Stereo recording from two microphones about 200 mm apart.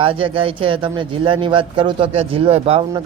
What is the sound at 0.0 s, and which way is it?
Speech, 25° right (ahead or behind).